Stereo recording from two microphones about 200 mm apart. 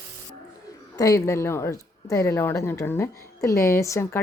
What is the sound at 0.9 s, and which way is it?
Speech, 15° left (ahead or behind).